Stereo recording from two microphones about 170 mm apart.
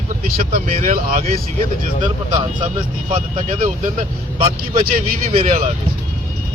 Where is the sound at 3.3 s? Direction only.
45° right (ahead or behind).